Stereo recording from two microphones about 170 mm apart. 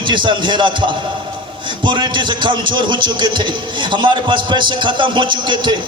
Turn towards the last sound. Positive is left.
turn(degrees=-25)  # may be behind; listen again after turning